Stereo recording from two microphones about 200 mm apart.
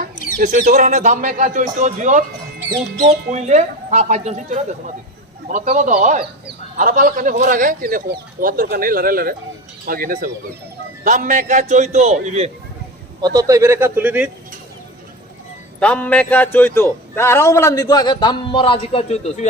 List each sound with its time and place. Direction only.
0.3 s speech: 40° right (ahead or behind)
13.2 s a man's voice: 15° right (ahead or behind)
15.8 s a man's voice: 5° left (ahead or behind); by 19.5 s 35° left (ahead or behind)